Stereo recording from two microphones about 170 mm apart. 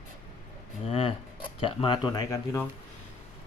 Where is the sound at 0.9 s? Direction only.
35° left (ahead or behind); by 2.7 s 20° left (ahead or behind).